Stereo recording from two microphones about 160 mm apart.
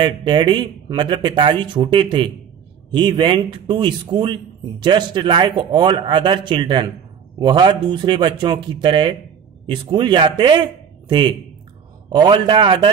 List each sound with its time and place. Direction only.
0.0 s a man's voice: 30° right (ahead or behind)